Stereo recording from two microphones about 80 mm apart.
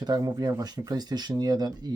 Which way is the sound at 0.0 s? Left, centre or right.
Right.